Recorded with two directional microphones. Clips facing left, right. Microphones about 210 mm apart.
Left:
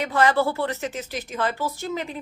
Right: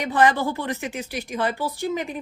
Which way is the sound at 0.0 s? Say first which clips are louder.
Even; 15° right (ahead or behind).